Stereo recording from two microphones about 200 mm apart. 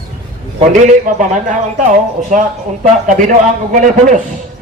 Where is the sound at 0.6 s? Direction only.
40° right (ahead or behind).